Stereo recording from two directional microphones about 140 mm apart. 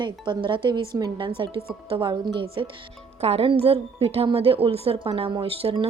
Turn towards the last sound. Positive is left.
turn(degrees=-40)  # may be behind; listen again after turning